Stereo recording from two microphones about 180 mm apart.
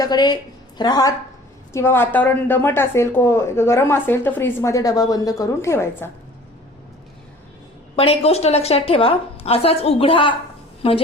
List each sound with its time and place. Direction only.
0.0 s a woman's voice: 25° left (ahead or behind)
7.9 s a woman's voice: 30° left (ahead or behind)